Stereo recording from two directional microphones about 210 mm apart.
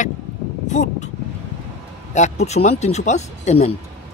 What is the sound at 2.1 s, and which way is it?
Speech, 35° left (ahead or behind).